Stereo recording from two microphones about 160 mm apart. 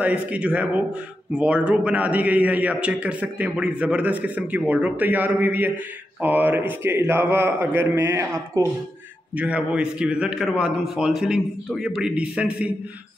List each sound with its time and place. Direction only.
0.0 s a man's voice: 10° right (ahead or behind)